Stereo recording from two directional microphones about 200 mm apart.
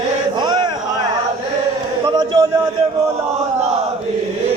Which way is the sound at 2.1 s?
20° right (ahead or behind).